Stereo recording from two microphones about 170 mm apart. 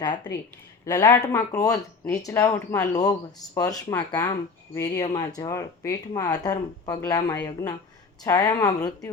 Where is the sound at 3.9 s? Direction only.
10° left (ahead or behind).